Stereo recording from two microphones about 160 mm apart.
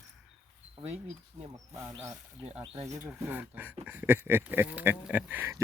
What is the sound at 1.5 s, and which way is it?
Speech, 20° right (ahead or behind).